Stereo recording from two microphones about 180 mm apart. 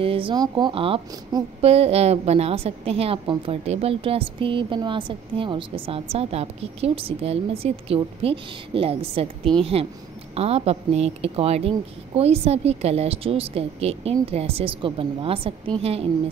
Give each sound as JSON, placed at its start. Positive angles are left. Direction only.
{"t": 0.0, "sound": "speech", "side_deg": -30}